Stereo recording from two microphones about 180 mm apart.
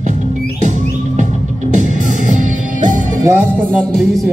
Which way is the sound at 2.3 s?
45° right (ahead or behind).